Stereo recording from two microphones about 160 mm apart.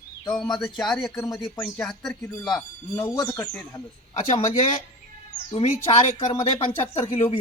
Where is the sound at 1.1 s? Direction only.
20° left (ahead or behind).